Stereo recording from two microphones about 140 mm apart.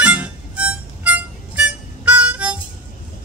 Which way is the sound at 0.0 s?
10° right (ahead or behind).